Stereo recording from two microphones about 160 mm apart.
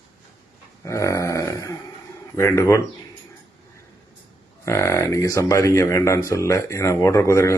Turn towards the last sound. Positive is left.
turn(degrees=20)  # may be behind; listen again after turning